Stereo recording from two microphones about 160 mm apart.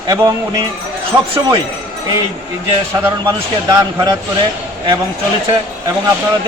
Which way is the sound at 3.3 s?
25° right (ahead or behind).